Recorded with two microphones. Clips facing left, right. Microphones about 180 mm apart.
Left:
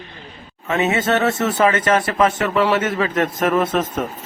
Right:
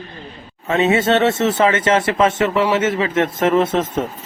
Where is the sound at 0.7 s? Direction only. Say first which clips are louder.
Right 3 dB; 30° right (ahead or behind).